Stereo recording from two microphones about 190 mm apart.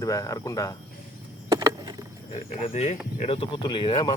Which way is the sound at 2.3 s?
35° left (ahead or behind).